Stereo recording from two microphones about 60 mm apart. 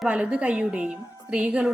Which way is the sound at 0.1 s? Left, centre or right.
Centre.